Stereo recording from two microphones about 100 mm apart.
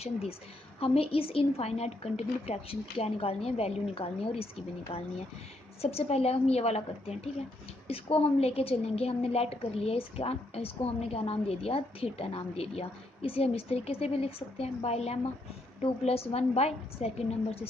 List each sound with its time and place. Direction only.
0.0 s a woman's voice: 80° left
7.9 s a woman's voice: 80° left